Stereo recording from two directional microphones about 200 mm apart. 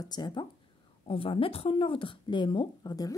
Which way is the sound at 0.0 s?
20° left (ahead or behind).